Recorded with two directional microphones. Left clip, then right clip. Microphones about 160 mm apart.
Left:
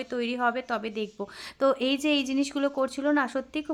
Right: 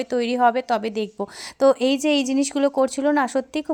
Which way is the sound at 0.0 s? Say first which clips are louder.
Right 9 dB; 30° right (ahead or behind).